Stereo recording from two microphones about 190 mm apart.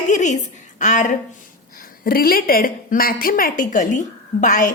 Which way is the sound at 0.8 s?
40° left (ahead or behind).